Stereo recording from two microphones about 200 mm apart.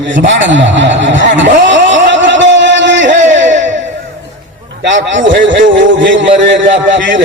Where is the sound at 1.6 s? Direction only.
65° right (ahead or behind).